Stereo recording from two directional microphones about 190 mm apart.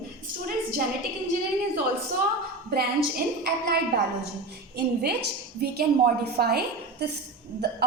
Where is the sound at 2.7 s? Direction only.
55° right (ahead or behind).